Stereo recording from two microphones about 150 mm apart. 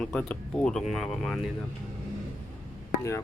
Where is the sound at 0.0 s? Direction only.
5° left (ahead or behind).